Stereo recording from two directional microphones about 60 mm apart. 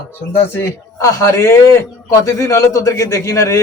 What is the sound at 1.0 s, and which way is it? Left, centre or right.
A man's voice, left.